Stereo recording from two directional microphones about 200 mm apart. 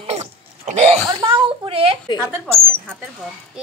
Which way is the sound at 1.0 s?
20° right (ahead or behind).